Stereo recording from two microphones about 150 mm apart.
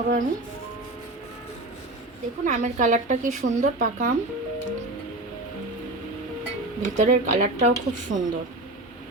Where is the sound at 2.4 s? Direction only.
55° right (ahead or behind).